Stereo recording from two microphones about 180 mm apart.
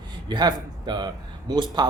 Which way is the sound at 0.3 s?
25° right (ahead or behind).